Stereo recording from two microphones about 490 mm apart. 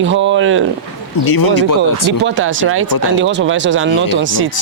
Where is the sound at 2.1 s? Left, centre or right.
Right.